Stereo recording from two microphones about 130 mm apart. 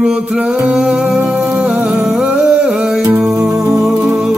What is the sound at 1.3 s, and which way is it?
Music, 15° right (ahead or behind).